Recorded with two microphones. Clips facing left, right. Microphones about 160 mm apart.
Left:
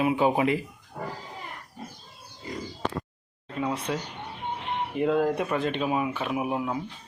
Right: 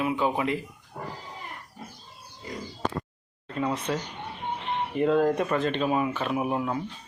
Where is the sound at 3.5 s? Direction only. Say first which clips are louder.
Right 1 dB; 5° left (ahead or behind).